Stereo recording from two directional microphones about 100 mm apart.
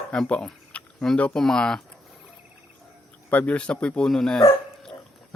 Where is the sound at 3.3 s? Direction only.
15° left (ahead or behind).